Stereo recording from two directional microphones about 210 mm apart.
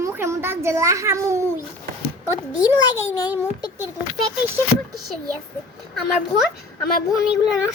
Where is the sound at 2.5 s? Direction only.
5° right (ahead or behind).